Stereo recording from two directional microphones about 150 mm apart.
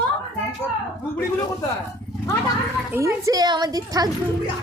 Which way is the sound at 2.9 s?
20° right (ahead or behind).